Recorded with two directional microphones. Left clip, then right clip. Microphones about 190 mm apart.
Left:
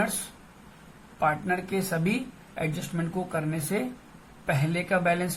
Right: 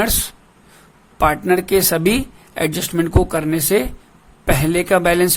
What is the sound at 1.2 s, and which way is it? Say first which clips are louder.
A man's voice: right 11 dB; 55° right (ahead or behind).